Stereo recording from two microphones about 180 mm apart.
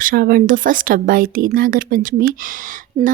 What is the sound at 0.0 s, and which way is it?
Speech, 55° right (ahead or behind).